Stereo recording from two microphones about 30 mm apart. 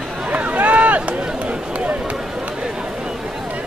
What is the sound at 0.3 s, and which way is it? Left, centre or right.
Run, right.